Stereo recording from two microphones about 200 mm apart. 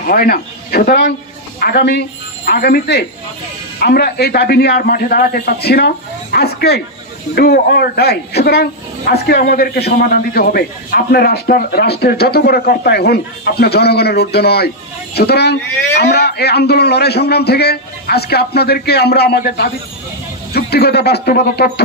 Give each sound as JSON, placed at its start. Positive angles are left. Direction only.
{"t": 0.0, "sound": "a man's voice", "side_deg": 45}